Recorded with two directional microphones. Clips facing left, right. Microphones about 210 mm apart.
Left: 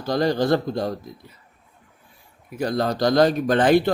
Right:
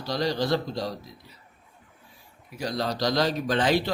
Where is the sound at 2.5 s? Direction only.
55° left (ahead or behind).